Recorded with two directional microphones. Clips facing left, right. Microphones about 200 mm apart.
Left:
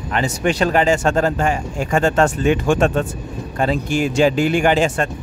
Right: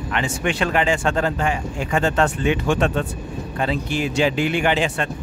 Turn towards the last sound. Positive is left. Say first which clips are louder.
# left 4 dB
turn(degrees=45)  # may be behind; listen again after turning